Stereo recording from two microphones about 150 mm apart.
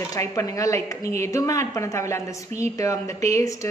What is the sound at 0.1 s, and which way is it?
A woman's voice, 20° left (ahead or behind).